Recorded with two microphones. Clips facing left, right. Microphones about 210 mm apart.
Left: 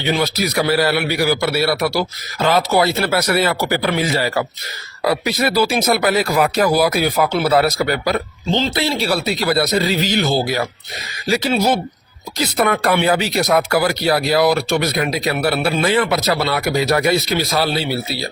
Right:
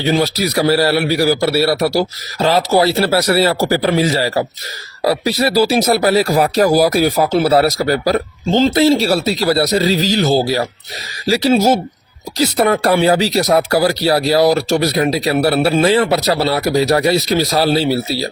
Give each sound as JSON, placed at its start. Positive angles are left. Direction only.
{"t": 0.0, "sound": "speech", "side_deg": -40}